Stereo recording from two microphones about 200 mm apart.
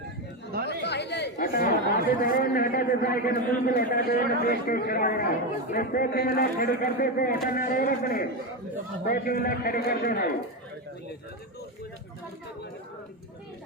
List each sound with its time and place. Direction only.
0.7 s speech: 55° left (ahead or behind)